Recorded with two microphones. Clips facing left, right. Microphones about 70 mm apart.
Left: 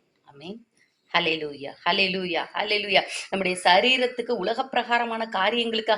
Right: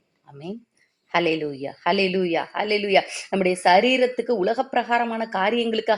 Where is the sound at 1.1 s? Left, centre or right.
Centre.